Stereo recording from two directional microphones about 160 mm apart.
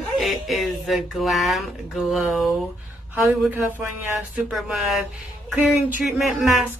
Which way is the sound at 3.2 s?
10° right (ahead or behind).